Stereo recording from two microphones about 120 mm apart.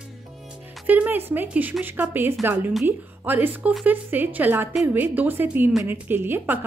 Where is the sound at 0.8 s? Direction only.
15° right (ahead or behind).